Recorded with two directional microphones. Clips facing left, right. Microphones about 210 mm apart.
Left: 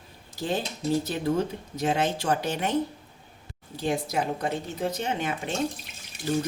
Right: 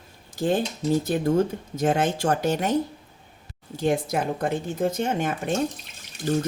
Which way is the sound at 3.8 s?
50° right (ahead or behind).